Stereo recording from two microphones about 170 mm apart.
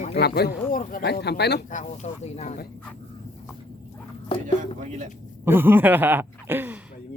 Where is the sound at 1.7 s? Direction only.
45° left (ahead or behind).